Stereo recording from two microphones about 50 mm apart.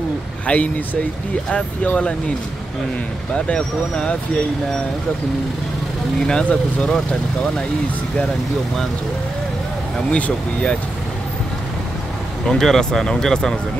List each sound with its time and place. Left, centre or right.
0.5 s speech: left
2.0 s speech: left
3.4 s speech: left
6.2 s speech: centre
10.1 s speech: left
12.4 s speech: centre